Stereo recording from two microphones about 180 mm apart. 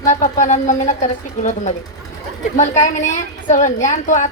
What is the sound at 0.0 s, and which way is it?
A woman's voice, 45° left (ahead or behind).